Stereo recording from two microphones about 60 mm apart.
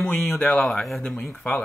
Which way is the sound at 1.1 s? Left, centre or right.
Centre.